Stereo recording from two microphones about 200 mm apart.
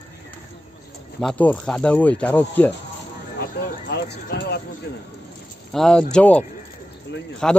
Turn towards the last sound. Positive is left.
turn(degrees=5)  # may be behind; listen again after turning